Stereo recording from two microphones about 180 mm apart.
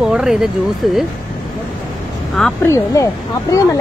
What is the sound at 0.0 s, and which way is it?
Speech, 5° right (ahead or behind).